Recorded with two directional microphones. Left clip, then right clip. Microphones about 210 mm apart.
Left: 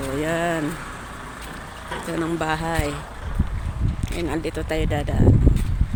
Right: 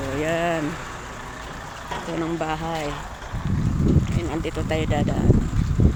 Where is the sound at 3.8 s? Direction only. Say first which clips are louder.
Right 12 dB; 60° right (ahead or behind).